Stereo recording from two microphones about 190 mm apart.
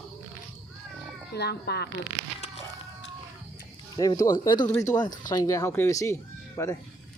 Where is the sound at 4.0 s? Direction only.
20° left (ahead or behind).